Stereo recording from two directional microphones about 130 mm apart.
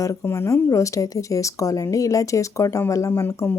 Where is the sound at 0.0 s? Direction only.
25° left (ahead or behind).